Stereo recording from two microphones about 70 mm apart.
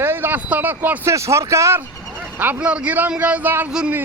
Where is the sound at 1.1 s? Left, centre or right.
Right.